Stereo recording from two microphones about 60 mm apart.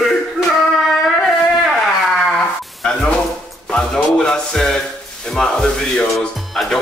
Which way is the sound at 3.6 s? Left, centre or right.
Centre.